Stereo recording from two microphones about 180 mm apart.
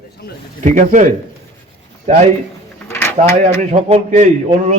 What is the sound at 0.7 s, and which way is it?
Speech, 45° right (ahead or behind).